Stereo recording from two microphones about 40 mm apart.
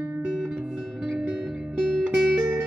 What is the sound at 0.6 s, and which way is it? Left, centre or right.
Music, right.